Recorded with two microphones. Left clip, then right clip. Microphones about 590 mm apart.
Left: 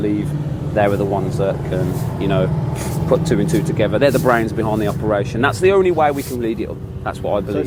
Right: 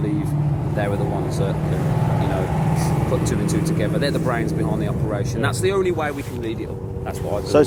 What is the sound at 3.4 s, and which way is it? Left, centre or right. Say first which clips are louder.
Speech: left 5 dB; left.